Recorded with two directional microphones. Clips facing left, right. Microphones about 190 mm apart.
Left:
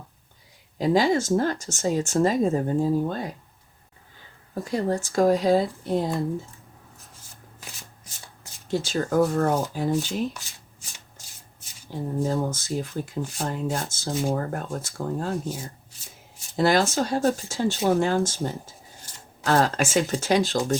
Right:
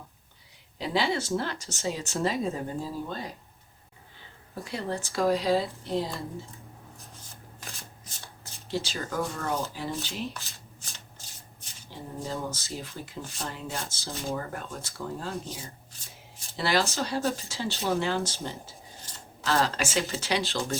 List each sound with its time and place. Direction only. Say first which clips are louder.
0.8 s speech: left 7 dB; 45° left (ahead or behind)
4.6 s speech: left 8 dB; 45° left (ahead or behind)
8.6 s speech: left 7 dB; 50° left (ahead or behind)
11.9 s speech: left 9 dB; 50° left (ahead or behind)
16.6 s speech: left 6 dB; 45° left (ahead or behind)